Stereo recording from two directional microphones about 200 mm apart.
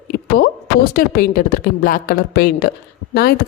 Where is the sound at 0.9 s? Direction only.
50° left (ahead or behind).